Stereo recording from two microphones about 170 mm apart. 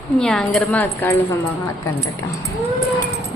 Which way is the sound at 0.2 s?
5° left (ahead or behind).